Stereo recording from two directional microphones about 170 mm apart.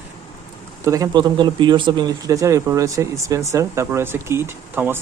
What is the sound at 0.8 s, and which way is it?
Speech, 20° right (ahead or behind).